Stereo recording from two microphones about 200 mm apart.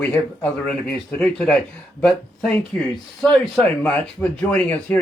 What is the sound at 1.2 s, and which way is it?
Speech, 5° left (ahead or behind).